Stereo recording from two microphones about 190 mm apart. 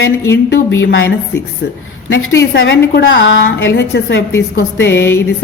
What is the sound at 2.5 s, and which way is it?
A woman's voice, 60° left (ahead or behind).